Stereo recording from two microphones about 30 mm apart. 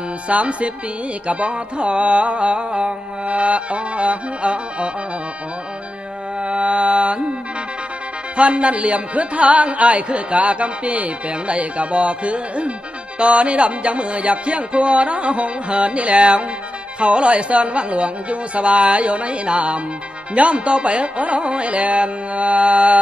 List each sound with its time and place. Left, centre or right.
0.3 s music: right
3.3 s music: right
6.4 s music: right
8.4 s music: right